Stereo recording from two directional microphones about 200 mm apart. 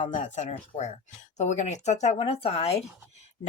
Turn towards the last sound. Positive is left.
turn(degrees=30)  # may be behind; listen again after turning